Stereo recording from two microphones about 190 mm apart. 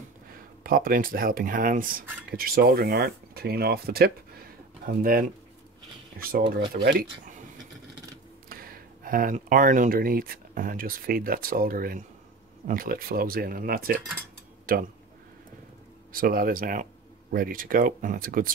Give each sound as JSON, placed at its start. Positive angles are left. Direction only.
{"t": 0.7, "sound": "speech", "side_deg": -50}
{"t": 8.5, "sound": "speech", "side_deg": -50}
{"t": 16.1, "sound": "speech", "side_deg": -50}